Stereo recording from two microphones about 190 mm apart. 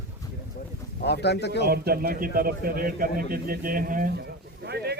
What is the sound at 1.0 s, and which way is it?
Speech, 60° left (ahead or behind).